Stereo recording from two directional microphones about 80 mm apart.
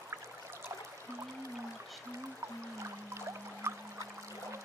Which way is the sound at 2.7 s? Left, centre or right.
Right.